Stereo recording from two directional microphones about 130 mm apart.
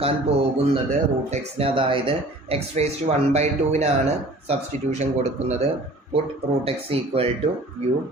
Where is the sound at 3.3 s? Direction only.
60° right (ahead or behind).